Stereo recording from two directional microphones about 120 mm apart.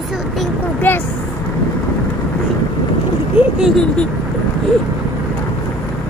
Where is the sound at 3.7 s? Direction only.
5° left (ahead or behind).